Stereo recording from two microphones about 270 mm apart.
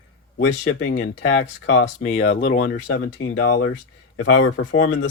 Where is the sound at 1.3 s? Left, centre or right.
Left.